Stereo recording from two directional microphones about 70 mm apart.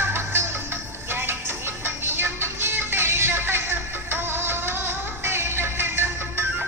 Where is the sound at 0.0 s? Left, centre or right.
Right.